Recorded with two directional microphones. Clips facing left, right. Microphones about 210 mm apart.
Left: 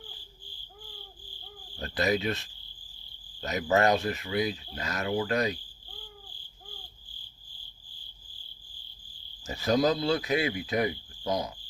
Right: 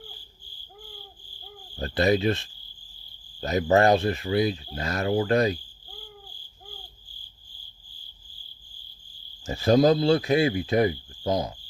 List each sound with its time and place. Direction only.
1.8 s speech: 30° right (ahead or behind)
9.4 s cricket: 30° right (ahead or behind)